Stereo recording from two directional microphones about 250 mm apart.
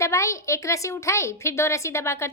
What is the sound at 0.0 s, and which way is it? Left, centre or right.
A woman's voice, centre.